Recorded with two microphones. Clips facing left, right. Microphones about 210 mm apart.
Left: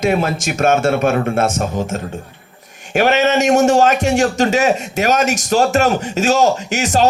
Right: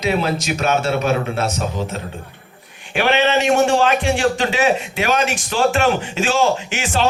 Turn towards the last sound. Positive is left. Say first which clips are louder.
# left 5 dB
turn(degrees=40)  # may be behind; listen again after turning